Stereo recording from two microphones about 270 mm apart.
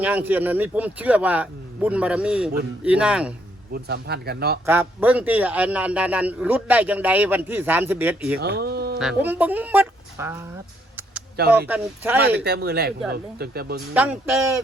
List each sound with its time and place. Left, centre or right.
0.0 s a man's voice: centre
3.7 s speech: right
4.6 s a man's voice: centre
8.4 s speech: right
9.0 s speech: centre
11.7 s speech: centre
12.4 s speech: right
13.9 s speech: centre